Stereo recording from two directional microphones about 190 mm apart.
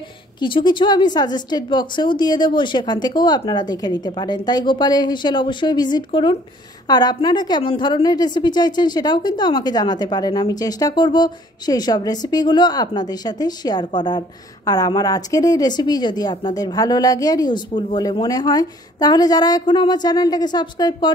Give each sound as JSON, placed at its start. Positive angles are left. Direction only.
{"t": 0.4, "sound": "a woman's voice", "side_deg": 25}